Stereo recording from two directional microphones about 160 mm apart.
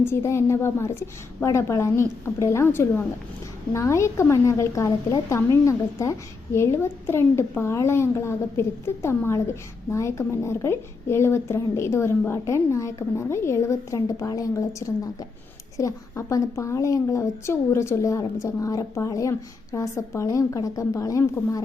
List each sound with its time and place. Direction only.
0.0 s a woman's voice: 15° left (ahead or behind)